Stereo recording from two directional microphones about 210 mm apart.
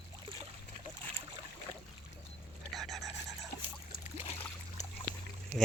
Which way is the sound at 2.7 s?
Centre (ahead or behind).